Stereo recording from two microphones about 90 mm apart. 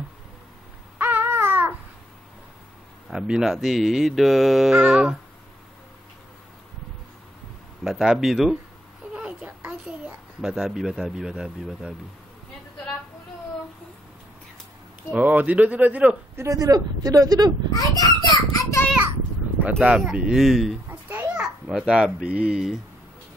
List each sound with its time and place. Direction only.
0.9 s babbling: 20° right (ahead or behind)
3.1 s speech: 5° right (ahead or behind)
3.5 s mantra: centre (ahead or behind)
7.8 s mantra: 5° right (ahead or behind)
9.1 s a sound: 10° right (ahead or behind)
15.1 s a man's voice: 20° right (ahead or behind)
16.3 s speech: 40° right (ahead or behind)
17.7 s a sound: 45° left (ahead or behind)
18.6 s a sound: 35° left (ahead or behind)
19.8 s a man's voice: 10° right (ahead or behind)
20.9 s a child's voice: 15° right (ahead or behind)